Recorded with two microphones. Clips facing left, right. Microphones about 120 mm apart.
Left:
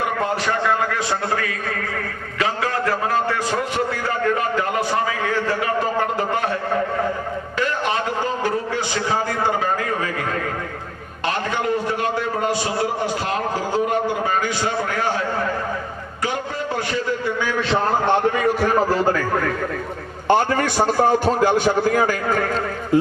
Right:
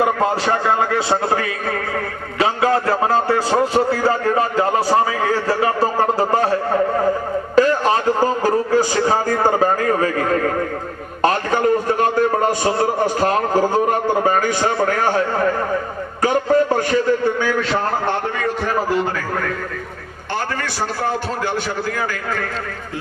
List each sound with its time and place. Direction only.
0.0 s a man's voice: 30° right (ahead or behind)
7.5 s a sound: 40° right (ahead or behind)
11.2 s a man's voice: 45° right (ahead or behind)
16.2 s a man's voice: 45° right (ahead or behind)